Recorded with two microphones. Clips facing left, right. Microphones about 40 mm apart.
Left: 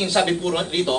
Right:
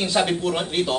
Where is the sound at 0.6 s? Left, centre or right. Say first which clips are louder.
Left 1 dB; centre.